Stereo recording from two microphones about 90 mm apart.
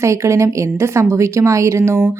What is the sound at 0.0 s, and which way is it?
A woman's voice, 35° right (ahead or behind).